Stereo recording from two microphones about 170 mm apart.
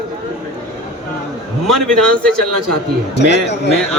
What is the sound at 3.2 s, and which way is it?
Speech, 85° left.